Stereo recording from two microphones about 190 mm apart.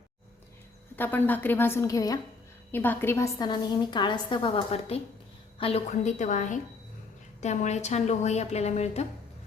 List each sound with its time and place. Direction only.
0.9 s a woman's voice: 10° left (ahead or behind); by 9.0 s 35° left (ahead or behind)